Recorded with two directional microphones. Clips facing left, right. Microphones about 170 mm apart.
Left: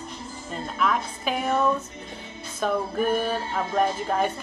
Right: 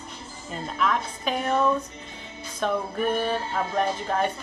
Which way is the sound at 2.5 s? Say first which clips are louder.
Left 1 dB; 5° left (ahead or behind).